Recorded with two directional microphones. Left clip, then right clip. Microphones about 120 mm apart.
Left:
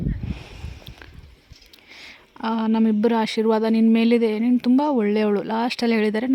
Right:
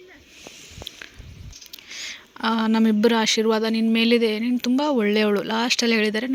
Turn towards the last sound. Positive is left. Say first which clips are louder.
# even
turn(degrees=35)  # may be behind; listen again after turning